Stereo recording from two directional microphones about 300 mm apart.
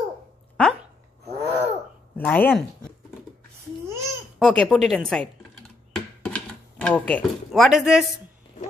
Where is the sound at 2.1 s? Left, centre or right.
Centre.